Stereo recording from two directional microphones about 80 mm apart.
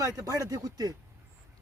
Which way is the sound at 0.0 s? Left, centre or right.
Right.